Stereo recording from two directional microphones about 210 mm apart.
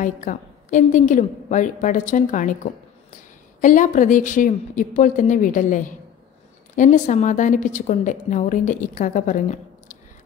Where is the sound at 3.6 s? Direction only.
40° left (ahead or behind).